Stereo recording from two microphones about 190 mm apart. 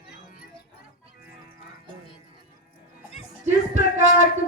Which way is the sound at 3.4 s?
40° right (ahead or behind).